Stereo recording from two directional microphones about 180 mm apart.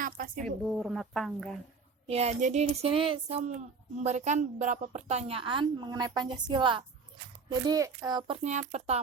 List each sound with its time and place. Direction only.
0.0 s a sound: 50° right (ahead or behind)
0.4 s a woman's voice: centre (ahead or behind)
2.0 s a woman's voice: 35° right (ahead or behind)
8.4 s a woman's voice: 40° right (ahead or behind)